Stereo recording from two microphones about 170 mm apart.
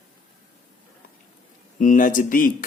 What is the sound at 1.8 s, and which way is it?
Speech, 50° left (ahead or behind).